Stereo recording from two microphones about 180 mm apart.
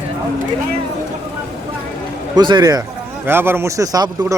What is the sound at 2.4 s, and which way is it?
Speech, 25° right (ahead or behind).